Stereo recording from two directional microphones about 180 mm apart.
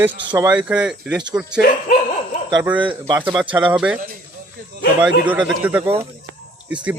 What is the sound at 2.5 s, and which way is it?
A man's voice, 10° right (ahead or behind).